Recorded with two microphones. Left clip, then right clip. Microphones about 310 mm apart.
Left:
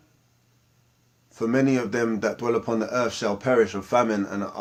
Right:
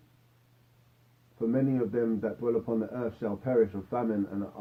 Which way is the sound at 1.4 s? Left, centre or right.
Left.